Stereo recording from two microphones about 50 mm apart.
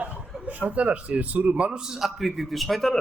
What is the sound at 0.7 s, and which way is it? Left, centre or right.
Speech, right.